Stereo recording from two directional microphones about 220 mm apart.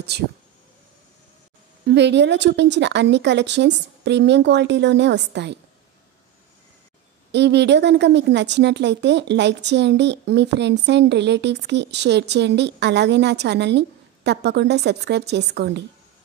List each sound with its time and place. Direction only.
0.1 s a woman's voice: 50° right (ahead or behind)
1.9 s a woman's voice: 50° right (ahead or behind)
7.3 s a woman's voice: 50° right (ahead or behind)